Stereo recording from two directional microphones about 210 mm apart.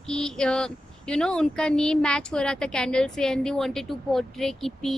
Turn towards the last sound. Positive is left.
turn(degrees=0)  # may be behind; listen again after turning